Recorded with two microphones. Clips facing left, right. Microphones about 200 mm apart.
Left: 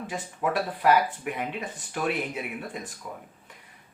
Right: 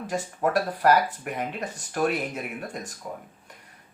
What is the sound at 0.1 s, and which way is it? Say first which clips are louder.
Speech: right 5 dB; 45° right (ahead or behind).